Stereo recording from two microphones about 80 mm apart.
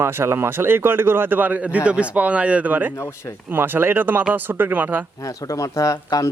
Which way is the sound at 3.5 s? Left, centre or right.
Right.